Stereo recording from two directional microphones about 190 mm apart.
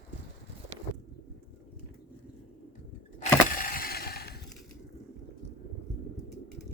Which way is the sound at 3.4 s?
50° left (ahead or behind).